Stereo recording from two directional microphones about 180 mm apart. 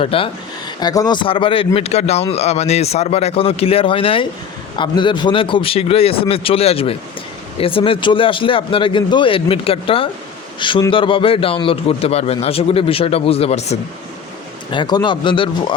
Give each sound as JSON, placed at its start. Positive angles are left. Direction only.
{"t": 0.0, "sound": "speech", "side_deg": 30}
{"t": 14.7, "sound": "speech", "side_deg": 25}